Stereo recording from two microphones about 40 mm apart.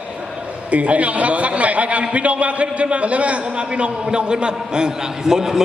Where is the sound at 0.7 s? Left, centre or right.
Right.